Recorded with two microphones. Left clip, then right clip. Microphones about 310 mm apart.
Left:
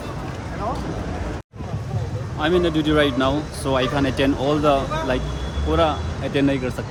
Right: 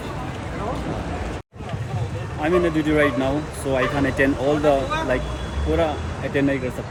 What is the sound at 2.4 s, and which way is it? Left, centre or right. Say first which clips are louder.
Speech: left 1 dB; centre.